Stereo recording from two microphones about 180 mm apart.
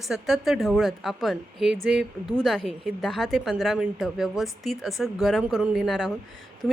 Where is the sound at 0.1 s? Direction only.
Centre (ahead or behind).